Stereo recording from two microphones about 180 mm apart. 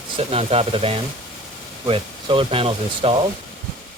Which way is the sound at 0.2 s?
35° right (ahead or behind).